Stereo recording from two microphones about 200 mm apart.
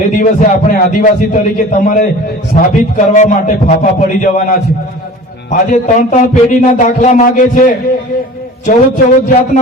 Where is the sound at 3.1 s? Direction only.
35° left (ahead or behind).